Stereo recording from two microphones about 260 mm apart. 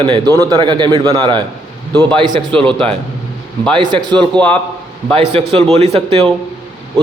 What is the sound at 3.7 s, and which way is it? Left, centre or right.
Speech, centre.